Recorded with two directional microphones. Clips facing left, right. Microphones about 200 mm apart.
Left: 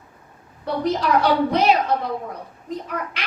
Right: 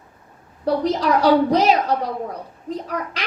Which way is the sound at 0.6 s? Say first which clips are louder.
Right 2 dB; 35° right (ahead or behind).